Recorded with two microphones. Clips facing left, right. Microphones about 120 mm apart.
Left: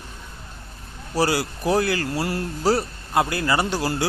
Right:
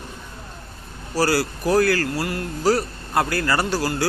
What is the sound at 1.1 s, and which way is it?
Speech, 20° left (ahead or behind).